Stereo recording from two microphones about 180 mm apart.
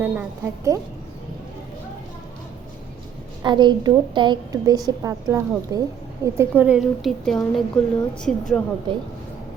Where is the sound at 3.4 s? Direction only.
25° right (ahead or behind).